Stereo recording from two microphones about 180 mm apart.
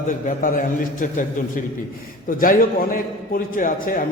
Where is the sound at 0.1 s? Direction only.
45° left (ahead or behind).